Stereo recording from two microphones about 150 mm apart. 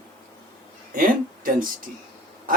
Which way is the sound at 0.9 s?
65° right (ahead or behind).